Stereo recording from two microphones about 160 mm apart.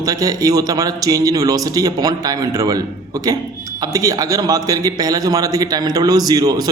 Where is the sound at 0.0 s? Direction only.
25° right (ahead or behind).